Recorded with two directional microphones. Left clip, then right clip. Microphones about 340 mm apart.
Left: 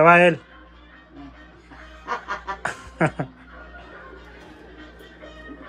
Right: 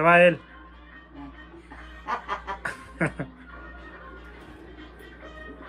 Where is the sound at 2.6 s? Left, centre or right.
Centre.